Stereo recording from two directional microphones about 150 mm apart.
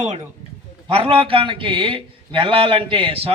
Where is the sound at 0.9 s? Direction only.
40° right (ahead or behind).